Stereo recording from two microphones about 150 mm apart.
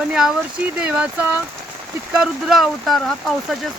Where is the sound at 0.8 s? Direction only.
5° right (ahead or behind).